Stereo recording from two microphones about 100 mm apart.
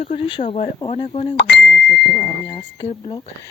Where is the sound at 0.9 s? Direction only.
90° left.